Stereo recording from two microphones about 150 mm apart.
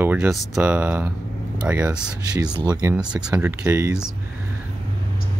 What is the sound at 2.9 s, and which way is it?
Speech, 5° right (ahead or behind).